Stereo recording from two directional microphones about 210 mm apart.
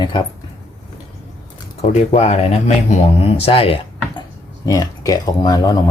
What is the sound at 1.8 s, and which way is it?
Speech, 35° left (ahead or behind).